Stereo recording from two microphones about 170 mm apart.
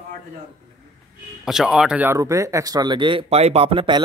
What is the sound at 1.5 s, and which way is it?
Speech, 5° right (ahead or behind).